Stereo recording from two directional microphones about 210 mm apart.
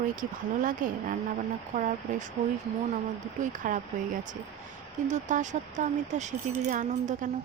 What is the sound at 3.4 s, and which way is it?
A woman's voice, 40° right (ahead or behind).